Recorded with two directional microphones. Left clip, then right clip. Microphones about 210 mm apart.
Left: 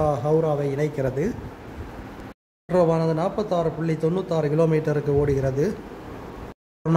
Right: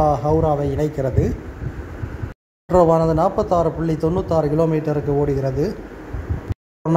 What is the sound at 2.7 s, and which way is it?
A man's voice, 10° right (ahead or behind).